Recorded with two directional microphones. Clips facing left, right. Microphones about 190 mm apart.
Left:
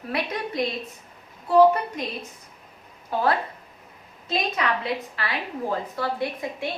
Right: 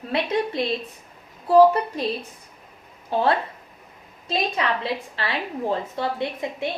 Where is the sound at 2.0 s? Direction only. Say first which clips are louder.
Right 5 dB; 35° right (ahead or behind).